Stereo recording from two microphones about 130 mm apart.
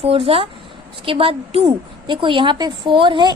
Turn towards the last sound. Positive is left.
turn(degrees=-35)  # may be behind; listen again after turning